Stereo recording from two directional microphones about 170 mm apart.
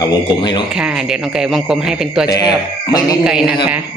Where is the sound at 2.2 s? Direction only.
20° left (ahead or behind).